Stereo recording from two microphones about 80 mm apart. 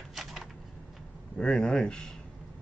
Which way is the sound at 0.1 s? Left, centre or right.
Centre.